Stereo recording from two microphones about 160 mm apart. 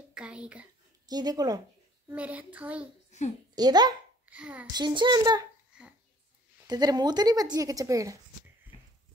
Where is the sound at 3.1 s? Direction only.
45° left (ahead or behind).